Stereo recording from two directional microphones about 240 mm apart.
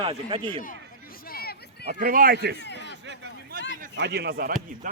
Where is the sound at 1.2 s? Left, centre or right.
Left.